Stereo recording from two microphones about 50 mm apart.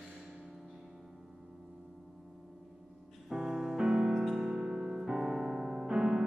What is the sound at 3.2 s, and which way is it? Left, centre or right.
Music, centre.